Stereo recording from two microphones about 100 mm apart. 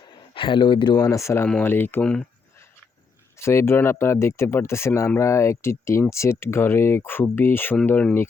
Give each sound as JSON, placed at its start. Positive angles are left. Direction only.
{"t": 0.1, "sound": "speech", "side_deg": 55}
{"t": 0.9, "sound": "speech", "side_deg": 35}
{"t": 3.3, "sound": "speech", "side_deg": 25}